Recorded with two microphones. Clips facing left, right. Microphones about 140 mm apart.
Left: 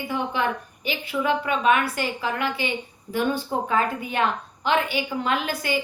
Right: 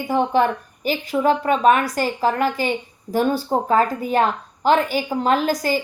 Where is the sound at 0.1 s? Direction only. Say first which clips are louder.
Right 8 dB; 45° right (ahead or behind).